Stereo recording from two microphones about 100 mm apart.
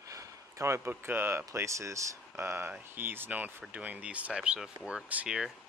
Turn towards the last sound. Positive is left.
turn(degrees=-5)  # may be behind; listen again after turning